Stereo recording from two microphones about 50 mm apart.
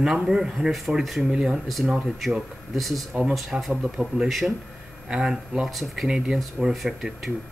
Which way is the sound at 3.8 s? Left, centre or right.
Centre.